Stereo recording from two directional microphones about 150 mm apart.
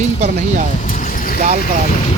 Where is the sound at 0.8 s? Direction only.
70° left (ahead or behind).